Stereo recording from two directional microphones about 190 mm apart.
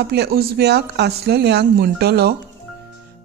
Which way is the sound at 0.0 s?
55° right (ahead or behind).